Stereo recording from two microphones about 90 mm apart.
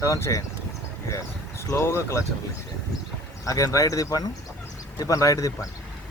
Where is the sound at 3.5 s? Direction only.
40° left (ahead or behind).